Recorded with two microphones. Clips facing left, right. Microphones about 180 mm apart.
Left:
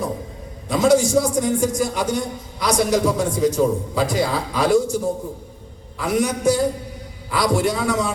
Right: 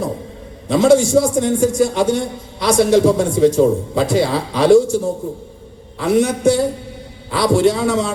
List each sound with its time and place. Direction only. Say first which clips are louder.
0.7 s a man's voice: right 4 dB; 25° right (ahead or behind)
6.0 s a man's voice: right 5 dB; 25° right (ahead or behind)